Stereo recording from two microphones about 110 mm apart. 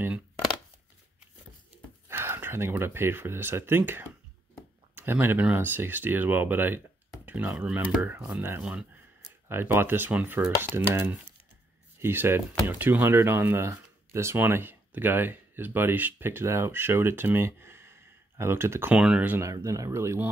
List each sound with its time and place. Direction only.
2.0 s speech: 20° right (ahead or behind)
18.9 s speech: 10° right (ahead or behind)
19.4 s speech: 30° right (ahead or behind)